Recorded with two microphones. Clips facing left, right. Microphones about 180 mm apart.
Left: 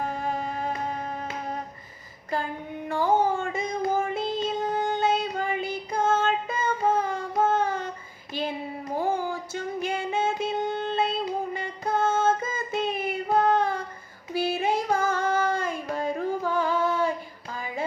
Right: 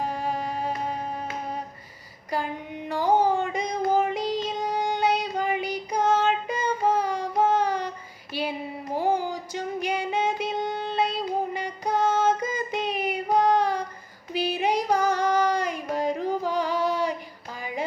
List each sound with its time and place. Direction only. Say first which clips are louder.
0.0 s music: right 1 dB; 10° right (ahead or behind)
2.9 s music: right 1 dB; 15° right (ahead or behind)
8.3 s a sound: right 1 dB; 10° right (ahead or behind)
9.0 s music: right 2 dB; 15° right (ahead or behind)
11.5 s child singing: right 1 dB; 15° right (ahead or behind)
14.3 s music: even; 15° right (ahead or behind)